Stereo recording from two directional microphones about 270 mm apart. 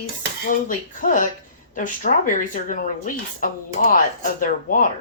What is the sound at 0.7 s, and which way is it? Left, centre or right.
Speech, left.